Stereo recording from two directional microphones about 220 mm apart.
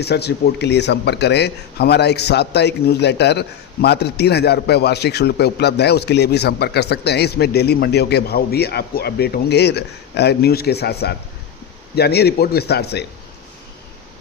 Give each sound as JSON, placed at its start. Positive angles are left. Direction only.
{"t": 0.0, "sound": "speech", "side_deg": 50}